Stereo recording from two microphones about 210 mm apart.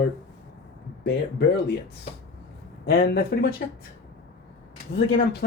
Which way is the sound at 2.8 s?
50° left (ahead or behind).